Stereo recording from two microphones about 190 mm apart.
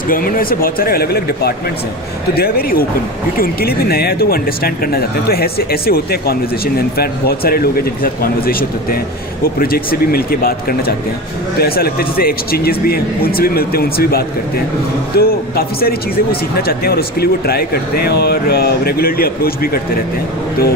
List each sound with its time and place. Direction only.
0.1 s speech: 50° left (ahead or behind)